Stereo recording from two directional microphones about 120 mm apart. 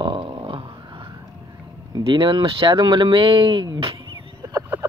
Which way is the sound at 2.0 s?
45° right (ahead or behind).